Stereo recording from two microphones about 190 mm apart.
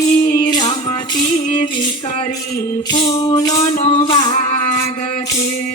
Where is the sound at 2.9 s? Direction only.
30° left (ahead or behind).